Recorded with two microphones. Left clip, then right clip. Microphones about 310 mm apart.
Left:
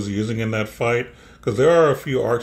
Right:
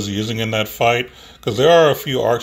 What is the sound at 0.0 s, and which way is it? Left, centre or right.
Speech, right.